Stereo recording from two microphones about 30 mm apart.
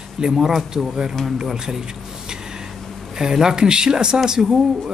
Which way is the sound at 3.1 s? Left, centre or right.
Centre.